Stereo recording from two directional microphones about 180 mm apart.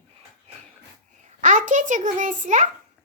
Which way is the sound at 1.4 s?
45° right (ahead or behind).